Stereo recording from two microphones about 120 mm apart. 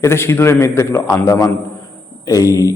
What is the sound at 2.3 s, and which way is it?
Speech, 30° left (ahead or behind).